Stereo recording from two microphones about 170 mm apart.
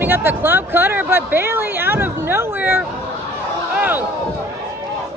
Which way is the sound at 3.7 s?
10° right (ahead or behind).